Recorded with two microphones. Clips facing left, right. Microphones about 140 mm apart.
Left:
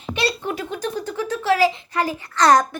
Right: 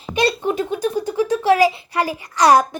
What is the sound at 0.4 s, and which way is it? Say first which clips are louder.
Speech: right 6 dB; 15° right (ahead or behind).